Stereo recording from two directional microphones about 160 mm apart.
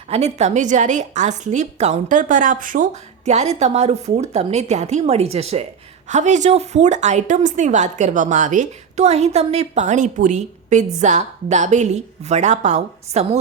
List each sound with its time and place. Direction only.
0.1 s a woman's voice: 45° right (ahead or behind)